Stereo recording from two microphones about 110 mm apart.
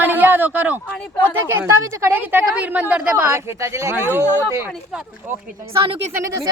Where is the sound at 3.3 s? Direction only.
25° right (ahead or behind).